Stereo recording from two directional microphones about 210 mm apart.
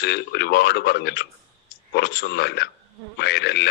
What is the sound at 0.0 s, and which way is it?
Speech, 50° left (ahead or behind).